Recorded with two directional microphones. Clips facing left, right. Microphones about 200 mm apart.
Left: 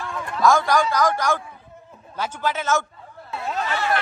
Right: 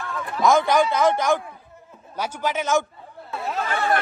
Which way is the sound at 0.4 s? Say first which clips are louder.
Right 1 dB; 20° right (ahead or behind).